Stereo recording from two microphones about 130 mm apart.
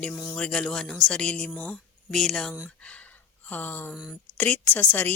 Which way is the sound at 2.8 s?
10° left (ahead or behind).